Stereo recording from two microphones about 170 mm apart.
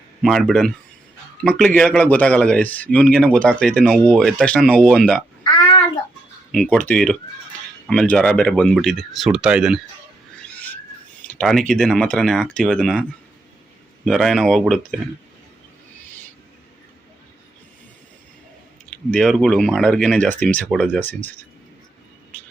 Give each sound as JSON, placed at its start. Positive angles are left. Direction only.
{"t": 0.2, "sound": "speech", "side_deg": 0}
{"t": 5.4, "sound": "a sound", "side_deg": 30}
{"t": 6.5, "sound": "speech", "side_deg": 5}
{"t": 11.3, "sound": "speech", "side_deg": 5}
{"t": 18.9, "sound": "speech", "side_deg": 5}